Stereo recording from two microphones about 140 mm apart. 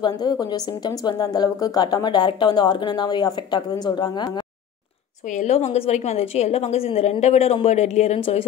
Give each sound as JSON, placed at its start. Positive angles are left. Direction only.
{"t": 0.0, "sound": "a woman's voice", "side_deg": 30}
{"t": 5.4, "sound": "a woman's voice", "side_deg": 50}